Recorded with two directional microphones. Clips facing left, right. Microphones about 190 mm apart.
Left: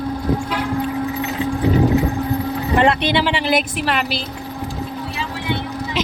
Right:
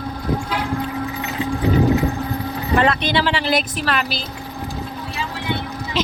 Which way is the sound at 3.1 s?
20° left (ahead or behind).